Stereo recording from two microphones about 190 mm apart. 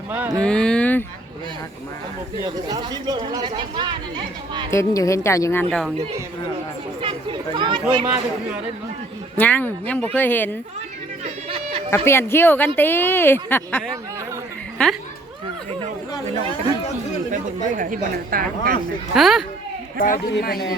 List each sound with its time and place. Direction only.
0.3 s speech: 5° left (ahead or behind)
2.4 s speech: 20° right (ahead or behind)
4.7 s a woman's voice: 15° left (ahead or behind)
7.0 s speech: 25° right (ahead or behind)
9.4 s a woman's voice: 10° left (ahead or behind)
11.4 s a sound: 30° right (ahead or behind)
11.9 s a woman's voice: 15° left (ahead or behind)
16.3 s speech: 30° right (ahead or behind)
17.3 s speech: 45° right (ahead or behind)
19.1 s speech: centre (ahead or behind)
20.0 s a man's voice: 50° left (ahead or behind)